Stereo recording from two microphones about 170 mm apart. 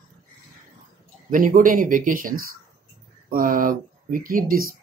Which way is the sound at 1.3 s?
50° right (ahead or behind).